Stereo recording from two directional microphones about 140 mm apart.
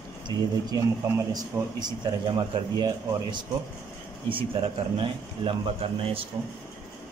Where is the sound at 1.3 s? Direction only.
30° right (ahead or behind).